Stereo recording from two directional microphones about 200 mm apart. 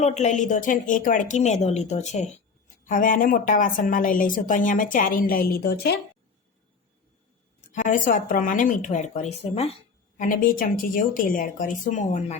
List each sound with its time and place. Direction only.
0.2 s a woman's voice: 35° left (ahead or behind)
7.7 s speech: 40° left (ahead or behind)
10.2 s a woman's voice: 40° left (ahead or behind)